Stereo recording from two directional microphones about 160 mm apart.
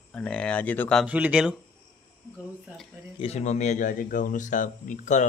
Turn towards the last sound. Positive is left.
turn(degrees=50)  # may be behind; listen again after turning